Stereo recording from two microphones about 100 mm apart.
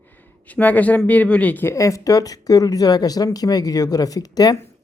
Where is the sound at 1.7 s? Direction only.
35° left (ahead or behind).